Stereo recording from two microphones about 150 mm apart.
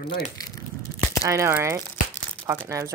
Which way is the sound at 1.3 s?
20° right (ahead or behind).